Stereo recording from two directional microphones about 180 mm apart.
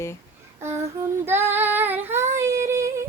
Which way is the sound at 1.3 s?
10° right (ahead or behind).